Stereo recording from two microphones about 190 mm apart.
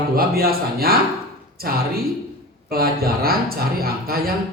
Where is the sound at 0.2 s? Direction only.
50° right (ahead or behind).